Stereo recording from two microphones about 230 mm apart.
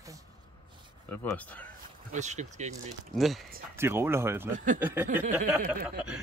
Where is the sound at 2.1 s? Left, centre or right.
Right.